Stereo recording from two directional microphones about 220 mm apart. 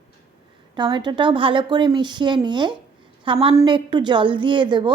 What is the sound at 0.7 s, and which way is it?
A woman's voice, 20° right (ahead or behind).